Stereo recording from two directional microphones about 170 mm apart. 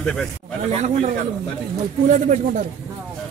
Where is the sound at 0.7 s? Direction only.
40° right (ahead or behind).